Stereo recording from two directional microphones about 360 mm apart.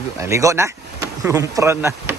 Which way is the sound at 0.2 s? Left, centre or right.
Centre.